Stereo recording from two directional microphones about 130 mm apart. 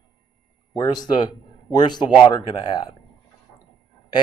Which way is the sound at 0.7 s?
30° left (ahead or behind).